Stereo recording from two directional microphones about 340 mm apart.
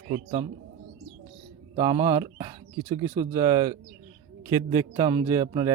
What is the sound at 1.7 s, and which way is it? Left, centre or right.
A man's voice, centre.